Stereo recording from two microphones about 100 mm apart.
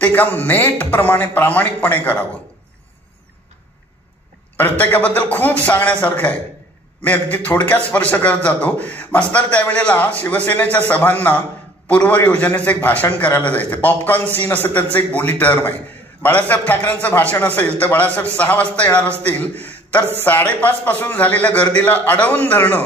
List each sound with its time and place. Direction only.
0.0 s speech: 15° left (ahead or behind)
4.6 s speech: 15° left (ahead or behind)
19.6 s a sound: 15° left (ahead or behind)
20.2 s speech: 15° left (ahead or behind)